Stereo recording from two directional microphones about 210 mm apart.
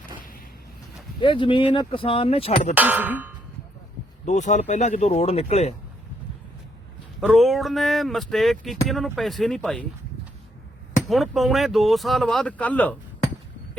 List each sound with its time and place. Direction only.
1.2 s speech: 25° left (ahead or behind)
2.7 s clang: 10° right (ahead or behind)
4.3 s speech: 35° left (ahead or behind)
7.2 s speech: centre (ahead or behind)
11.1 s speech: centre (ahead or behind)